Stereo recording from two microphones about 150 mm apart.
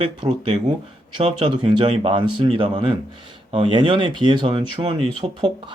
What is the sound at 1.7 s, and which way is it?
Speech, 35° right (ahead or behind).